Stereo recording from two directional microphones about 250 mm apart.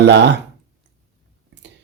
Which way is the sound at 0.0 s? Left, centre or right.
Right.